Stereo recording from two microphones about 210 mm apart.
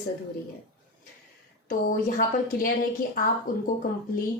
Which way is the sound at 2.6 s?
40° left (ahead or behind).